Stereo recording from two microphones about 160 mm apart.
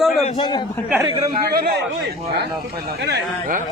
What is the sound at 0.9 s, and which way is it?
Speech, 15° right (ahead or behind).